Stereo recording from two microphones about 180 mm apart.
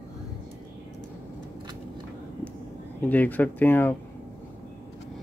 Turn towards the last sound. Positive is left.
turn(degrees=10)  # may be behind; listen again after turning